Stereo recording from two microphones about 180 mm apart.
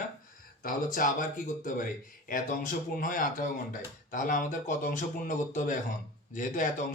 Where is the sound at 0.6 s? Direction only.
50° left (ahead or behind).